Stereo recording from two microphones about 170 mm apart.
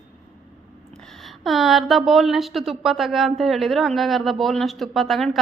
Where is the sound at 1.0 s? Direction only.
Centre (ahead or behind).